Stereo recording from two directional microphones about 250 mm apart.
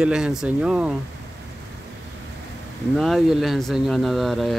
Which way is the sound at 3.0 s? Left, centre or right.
Centre.